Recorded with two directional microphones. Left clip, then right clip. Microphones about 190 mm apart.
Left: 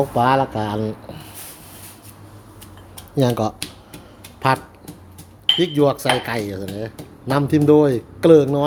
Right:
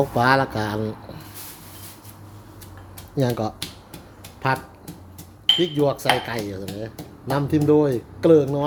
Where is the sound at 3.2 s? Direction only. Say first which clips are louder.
Left 4 dB; 20° left (ahead or behind).